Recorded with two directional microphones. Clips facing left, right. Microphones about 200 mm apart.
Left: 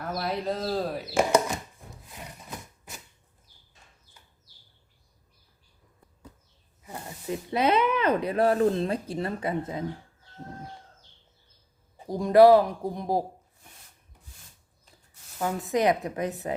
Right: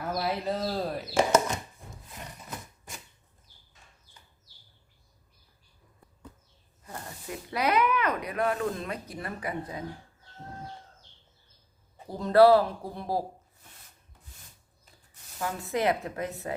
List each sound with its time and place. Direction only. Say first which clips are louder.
0.0 s speech: even; 5° right (ahead or behind)
7.3 s speech: left 4 dB; 25° left (ahead or behind)
12.0 s speech: left 3 dB; 15° left (ahead or behind)
15.4 s speech: left 4 dB; 15° left (ahead or behind)